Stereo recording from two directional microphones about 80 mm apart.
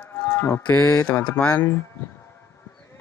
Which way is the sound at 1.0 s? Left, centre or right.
Centre.